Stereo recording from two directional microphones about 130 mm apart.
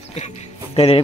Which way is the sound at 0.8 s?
50° left (ahead or behind).